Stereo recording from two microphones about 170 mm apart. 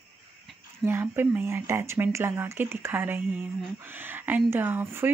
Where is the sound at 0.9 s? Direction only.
10° right (ahead or behind).